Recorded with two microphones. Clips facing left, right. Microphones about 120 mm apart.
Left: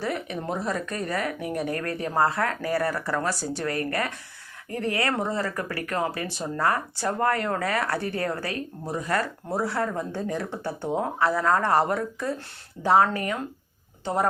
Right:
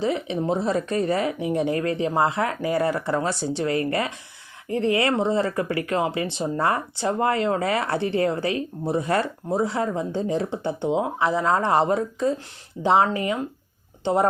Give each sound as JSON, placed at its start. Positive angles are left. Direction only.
{"t": 0.0, "sound": "speech", "side_deg": -20}